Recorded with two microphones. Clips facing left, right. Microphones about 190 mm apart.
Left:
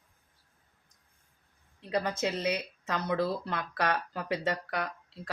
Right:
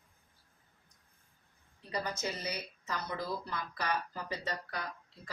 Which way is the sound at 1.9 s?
85° left.